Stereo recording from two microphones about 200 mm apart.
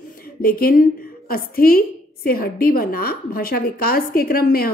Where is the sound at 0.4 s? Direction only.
50° left (ahead or behind).